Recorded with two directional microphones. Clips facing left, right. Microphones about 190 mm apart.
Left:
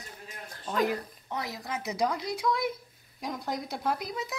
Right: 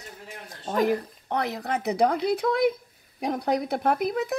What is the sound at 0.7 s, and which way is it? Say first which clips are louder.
A child's voice: right 5 dB; 55° right (ahead or behind).